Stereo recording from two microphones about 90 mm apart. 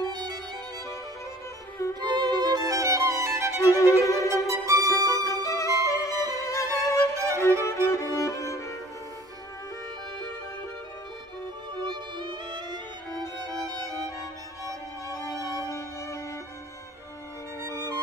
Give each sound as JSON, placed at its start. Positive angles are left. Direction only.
{"t": 0.0, "sound": "violin", "side_deg": -50}
{"t": 2.0, "sound": "music", "side_deg": -50}
{"t": 4.0, "sound": "violin", "side_deg": 35}
{"t": 4.3, "sound": "music", "side_deg": -35}
{"t": 5.1, "sound": "violin", "side_deg": 35}
{"t": 5.9, "sound": "music", "side_deg": 35}
{"t": 7.0, "sound": "music", "side_deg": -35}
{"t": 7.6, "sound": "music", "side_deg": 35}
{"t": 11.7, "sound": "music", "side_deg": -60}
{"t": 15.1, "sound": "music", "side_deg": 40}
{"t": 17.6, "sound": "music", "side_deg": -35}